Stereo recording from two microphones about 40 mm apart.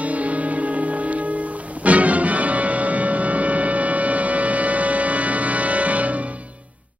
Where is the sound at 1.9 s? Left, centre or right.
Right.